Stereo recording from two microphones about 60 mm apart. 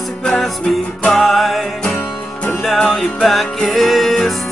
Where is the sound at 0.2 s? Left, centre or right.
Centre.